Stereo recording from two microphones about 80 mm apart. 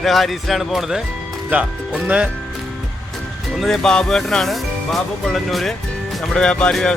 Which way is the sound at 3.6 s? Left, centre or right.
Centre.